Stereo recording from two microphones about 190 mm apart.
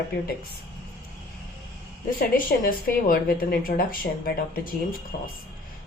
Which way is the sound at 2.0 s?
50° left (ahead or behind).